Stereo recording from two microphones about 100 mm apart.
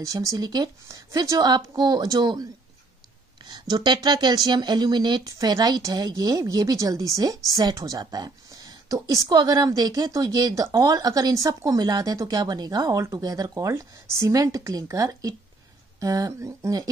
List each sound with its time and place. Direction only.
0.0 s a woman's voice: 35° right (ahead or behind)
3.4 s a woman's voice: 45° right (ahead or behind)